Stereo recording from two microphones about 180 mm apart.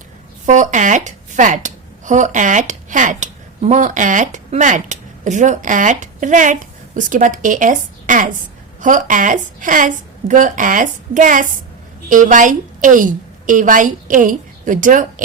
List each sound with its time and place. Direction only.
0.4 s a woman's voice: 45° right (ahead or behind)